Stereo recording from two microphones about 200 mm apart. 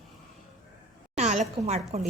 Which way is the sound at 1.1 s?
35° right (ahead or behind).